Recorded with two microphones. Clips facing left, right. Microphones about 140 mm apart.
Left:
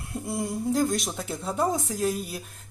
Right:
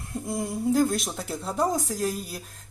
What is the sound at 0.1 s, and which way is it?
A woman's voice, centre (ahead or behind).